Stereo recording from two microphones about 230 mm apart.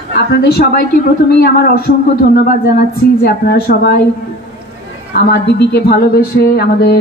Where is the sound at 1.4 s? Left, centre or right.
Left.